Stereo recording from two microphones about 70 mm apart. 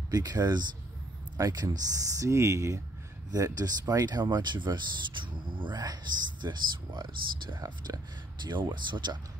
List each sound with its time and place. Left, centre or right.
0.1 s speech: right
1.4 s speech: right
3.3 s speech: right
5.7 s speech: right
6.4 s speech: right
7.6 s speech: right
8.5 s speech: right